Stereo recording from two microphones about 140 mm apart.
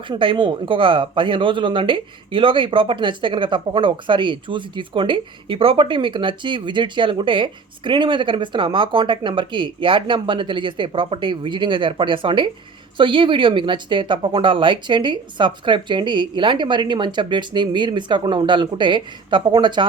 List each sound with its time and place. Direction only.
0.1 s speech: 35° right (ahead or behind)